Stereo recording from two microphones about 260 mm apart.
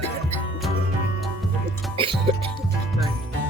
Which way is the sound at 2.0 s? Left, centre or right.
Centre.